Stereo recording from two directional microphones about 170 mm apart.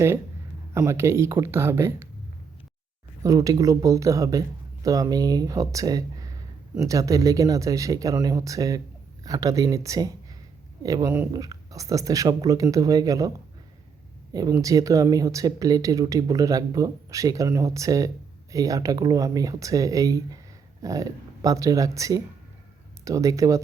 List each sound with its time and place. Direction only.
0.7 s speech: 15° right (ahead or behind)
3.2 s speech: 20° right (ahead or behind)
14.3 s speech: 20° right (ahead or behind)